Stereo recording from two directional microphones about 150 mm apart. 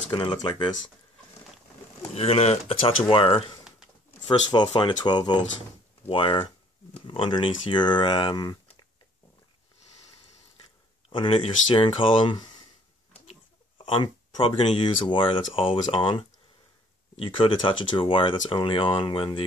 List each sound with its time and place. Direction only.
0.1 s speech: 30° left (ahead or behind)
2.1 s speech: 40° left (ahead or behind)
11.1 s speech: 35° left (ahead or behind)
13.3 s a sound: 35° left (ahead or behind)
14.8 s speech: 35° left (ahead or behind)